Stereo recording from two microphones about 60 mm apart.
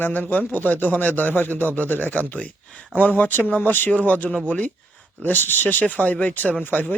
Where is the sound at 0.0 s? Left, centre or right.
Left.